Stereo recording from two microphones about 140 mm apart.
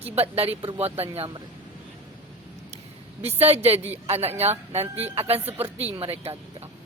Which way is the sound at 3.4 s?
45° right (ahead or behind).